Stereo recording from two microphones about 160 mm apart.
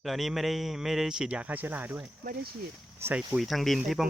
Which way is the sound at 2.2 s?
80° right.